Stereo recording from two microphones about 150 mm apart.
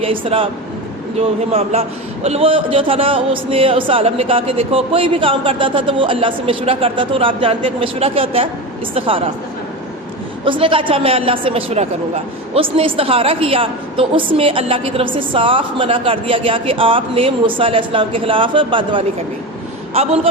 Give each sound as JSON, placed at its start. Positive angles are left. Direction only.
{"t": 0.0, "sound": "a woman's voice", "side_deg": -40}
{"t": 1.5, "sound": "a woman's voice", "side_deg": -45}
{"t": 10.4, "sound": "a woman's voice", "side_deg": -35}